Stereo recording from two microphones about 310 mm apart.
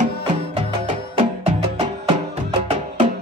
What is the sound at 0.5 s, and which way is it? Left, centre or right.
Music, centre.